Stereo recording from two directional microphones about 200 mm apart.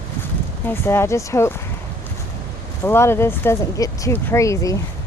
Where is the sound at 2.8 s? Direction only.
10° left (ahead or behind).